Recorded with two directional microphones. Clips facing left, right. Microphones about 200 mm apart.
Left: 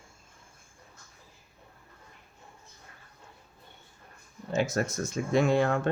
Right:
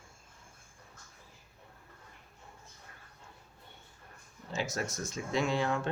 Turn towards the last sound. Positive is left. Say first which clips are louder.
# left 7 dB
turn(degrees=55)  # may be behind; listen again after turning